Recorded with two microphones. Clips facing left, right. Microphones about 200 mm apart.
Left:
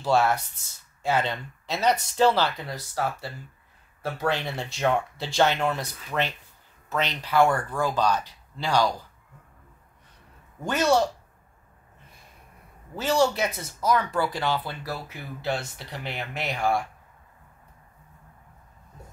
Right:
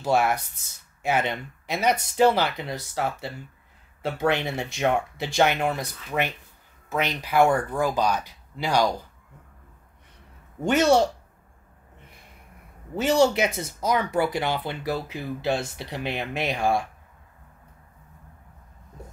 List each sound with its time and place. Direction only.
0.0 s speech: 15° right (ahead or behind)
10.6 s speech: 20° right (ahead or behind)
12.9 s speech: 20° right (ahead or behind)